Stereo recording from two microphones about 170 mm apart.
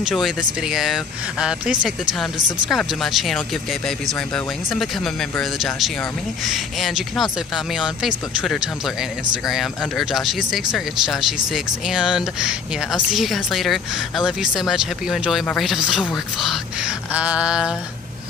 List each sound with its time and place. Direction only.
0.0 s speech: centre (ahead or behind)
4.7 s speech: centre (ahead or behind)